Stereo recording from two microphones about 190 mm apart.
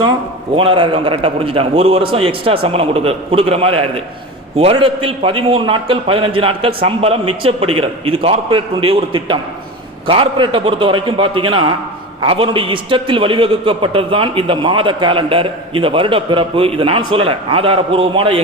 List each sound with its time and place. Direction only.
0.5 s a man's voice: 25° right (ahead or behind)